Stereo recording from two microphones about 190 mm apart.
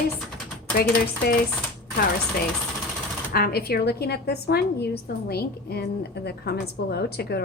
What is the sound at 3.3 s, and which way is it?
A woman's voice, 55° left (ahead or behind).